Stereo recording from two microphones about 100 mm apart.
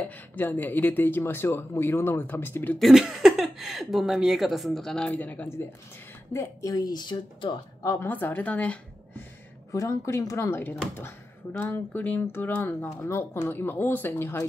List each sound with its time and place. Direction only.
0.0 s speech: 20° left (ahead or behind)
2.8 s speech: 5° right (ahead or behind); by 5.5 s 15° left (ahead or behind)
6.3 s speech: 30° left (ahead or behind); by 7.5 s 50° left (ahead or behind)
7.8 s a woman's voice: 30° left (ahead or behind)
8.1 s a woman's voice: 20° left (ahead or behind)
9.7 s speech: 30° left (ahead or behind)